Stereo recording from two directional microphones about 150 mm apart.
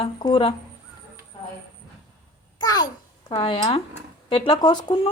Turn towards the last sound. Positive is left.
turn(degrees=30)  # may be behind; listen again after turning